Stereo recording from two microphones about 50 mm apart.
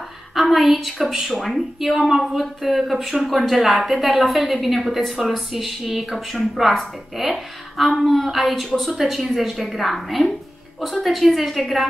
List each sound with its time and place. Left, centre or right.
0.3 s a woman's voice: centre